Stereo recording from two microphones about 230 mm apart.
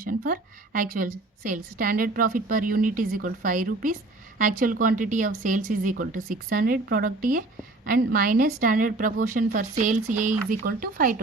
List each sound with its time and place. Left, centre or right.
0.1 s a woman's voice: right